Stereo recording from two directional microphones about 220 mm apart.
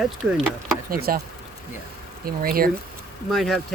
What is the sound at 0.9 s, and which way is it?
Speech, 40° right (ahead or behind).